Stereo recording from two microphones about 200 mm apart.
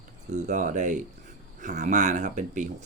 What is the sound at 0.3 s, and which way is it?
Speech, 35° right (ahead or behind).